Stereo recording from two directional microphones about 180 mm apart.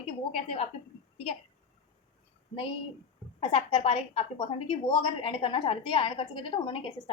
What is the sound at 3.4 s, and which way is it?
A woman's voice, 30° left (ahead or behind).